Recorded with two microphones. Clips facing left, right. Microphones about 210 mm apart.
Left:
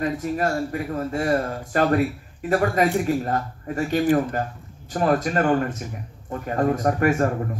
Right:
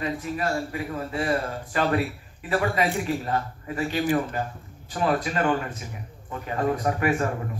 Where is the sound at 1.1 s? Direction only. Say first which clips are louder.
Left 3 dB; 45° left (ahead or behind).